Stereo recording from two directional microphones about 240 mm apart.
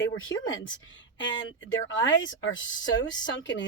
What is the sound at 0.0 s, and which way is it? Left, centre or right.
Speech, left.